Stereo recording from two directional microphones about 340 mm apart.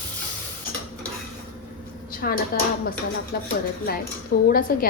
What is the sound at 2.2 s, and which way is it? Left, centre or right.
A woman's voice, left.